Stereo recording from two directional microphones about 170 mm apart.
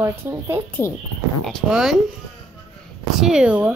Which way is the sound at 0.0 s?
15° right (ahead or behind).